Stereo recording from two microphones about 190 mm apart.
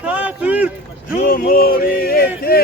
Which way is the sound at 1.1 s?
50° left (ahead or behind).